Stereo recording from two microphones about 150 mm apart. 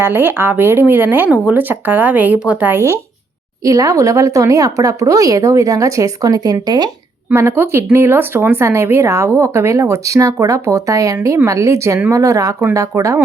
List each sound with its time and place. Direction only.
0.0 s speech: 15° right (ahead or behind)
7.3 s speech: 15° right (ahead or behind)